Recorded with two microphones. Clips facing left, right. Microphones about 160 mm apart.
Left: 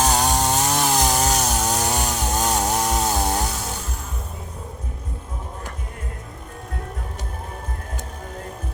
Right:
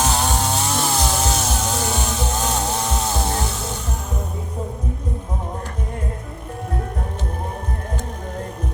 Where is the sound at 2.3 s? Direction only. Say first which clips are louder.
Left 3 dB; 40° left (ahead or behind).